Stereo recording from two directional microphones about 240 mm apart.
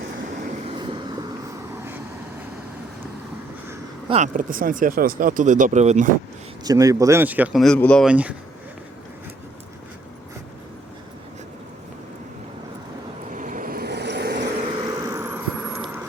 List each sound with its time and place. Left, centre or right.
0.7 s vehicle: centre
4.1 s speech: right
6.7 s speech: centre
13.3 s vehicle: right
14.6 s vehicle: right